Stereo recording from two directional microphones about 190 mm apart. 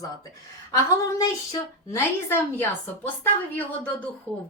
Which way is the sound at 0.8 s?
15° left (ahead or behind).